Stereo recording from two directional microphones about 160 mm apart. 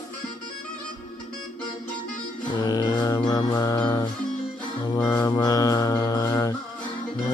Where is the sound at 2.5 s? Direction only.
25° left (ahead or behind).